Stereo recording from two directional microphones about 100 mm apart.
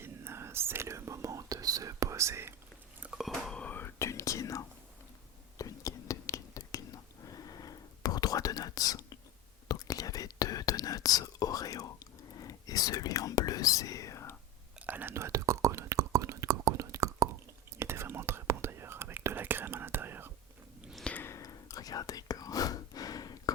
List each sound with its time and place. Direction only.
0.0 s whispering: 25° right (ahead or behind)
3.0 s a sound: 5° right (ahead or behind)
3.6 s whispering: 20° left (ahead or behind)
14.8 s whispering: 15° right (ahead or behind)
21.0 s a sound: 15° left (ahead or behind)
21.2 s whispering: 30° left (ahead or behind)